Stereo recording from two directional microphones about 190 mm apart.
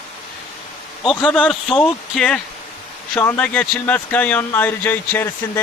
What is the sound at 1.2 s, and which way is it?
A man's voice, centre (ahead or behind).